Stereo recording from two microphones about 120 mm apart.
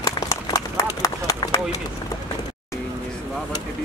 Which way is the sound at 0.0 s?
25° left (ahead or behind).